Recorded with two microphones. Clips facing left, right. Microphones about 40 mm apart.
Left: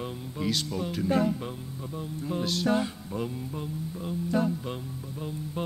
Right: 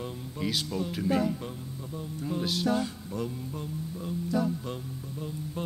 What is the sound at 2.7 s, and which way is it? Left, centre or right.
Music, left.